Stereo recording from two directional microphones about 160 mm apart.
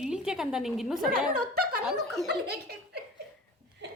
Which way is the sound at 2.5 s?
90° right.